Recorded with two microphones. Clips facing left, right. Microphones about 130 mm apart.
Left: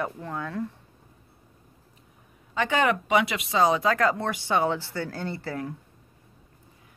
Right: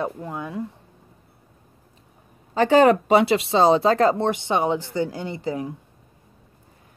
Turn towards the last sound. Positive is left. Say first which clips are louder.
# right 4 dB
turn(degrees=-15)  # may be behind; listen again after turning